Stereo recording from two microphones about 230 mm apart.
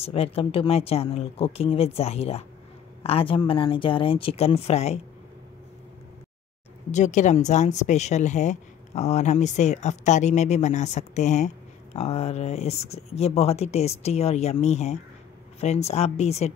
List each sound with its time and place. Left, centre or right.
0.0 s speech: left
6.9 s speech: left